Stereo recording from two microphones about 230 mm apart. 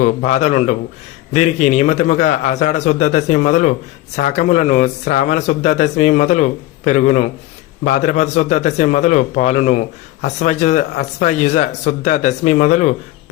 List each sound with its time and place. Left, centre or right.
0.0 s a man's voice: left